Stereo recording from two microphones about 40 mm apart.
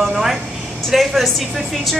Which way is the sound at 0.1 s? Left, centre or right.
Centre.